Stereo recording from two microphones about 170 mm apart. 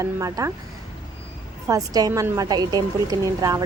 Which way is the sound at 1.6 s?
20° right (ahead or behind).